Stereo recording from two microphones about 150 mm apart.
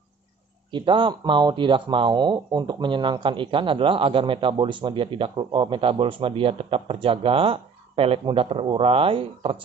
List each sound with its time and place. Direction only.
0.7 s speech: 30° right (ahead or behind)